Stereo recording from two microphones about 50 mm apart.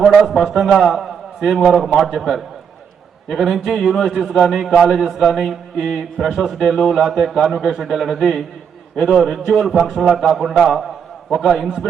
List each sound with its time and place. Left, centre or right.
0.2 s a man's voice: centre
10.6 s a man's voice: centre